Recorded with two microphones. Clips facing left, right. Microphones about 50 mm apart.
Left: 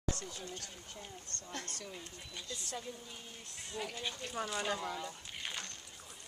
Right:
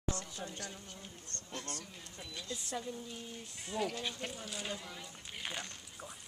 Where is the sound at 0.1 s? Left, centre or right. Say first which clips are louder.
Right 1 dB; right.